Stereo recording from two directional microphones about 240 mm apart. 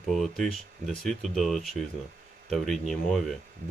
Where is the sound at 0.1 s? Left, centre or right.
Centre.